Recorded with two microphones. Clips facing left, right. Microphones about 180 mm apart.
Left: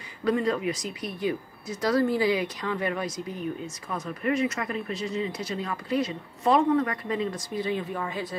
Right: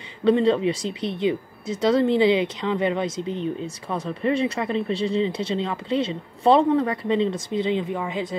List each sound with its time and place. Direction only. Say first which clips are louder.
0.2 s speech: right 7 dB; 25° right (ahead or behind)